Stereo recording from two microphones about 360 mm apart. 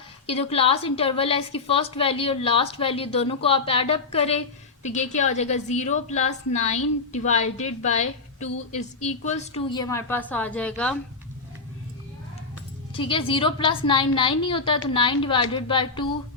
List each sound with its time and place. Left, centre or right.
0.3 s a woman's voice: centre
12.9 s a woman's voice: centre